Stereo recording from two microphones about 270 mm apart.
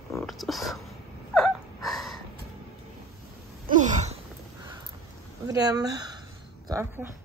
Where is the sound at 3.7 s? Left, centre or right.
Right.